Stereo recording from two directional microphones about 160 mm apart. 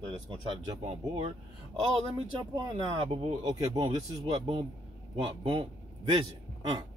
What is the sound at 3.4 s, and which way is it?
Speech, 25° right (ahead or behind).